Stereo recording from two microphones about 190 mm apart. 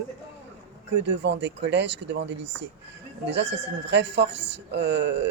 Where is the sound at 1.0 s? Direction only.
65° right (ahead or behind).